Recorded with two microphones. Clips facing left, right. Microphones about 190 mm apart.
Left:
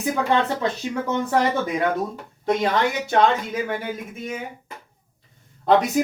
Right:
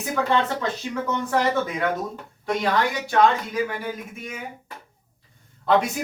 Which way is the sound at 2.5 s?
20° left (ahead or behind).